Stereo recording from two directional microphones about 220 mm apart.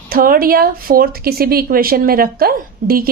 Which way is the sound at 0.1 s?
40° right (ahead or behind).